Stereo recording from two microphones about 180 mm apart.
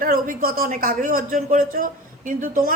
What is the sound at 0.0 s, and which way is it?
Speech, 50° right (ahead or behind).